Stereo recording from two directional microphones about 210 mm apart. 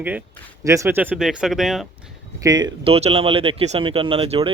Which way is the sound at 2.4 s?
20° right (ahead or behind).